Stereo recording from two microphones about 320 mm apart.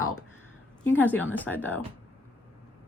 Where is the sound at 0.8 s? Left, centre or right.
Centre.